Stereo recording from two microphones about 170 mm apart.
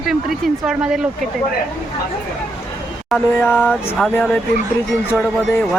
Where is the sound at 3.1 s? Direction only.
5° left (ahead or behind).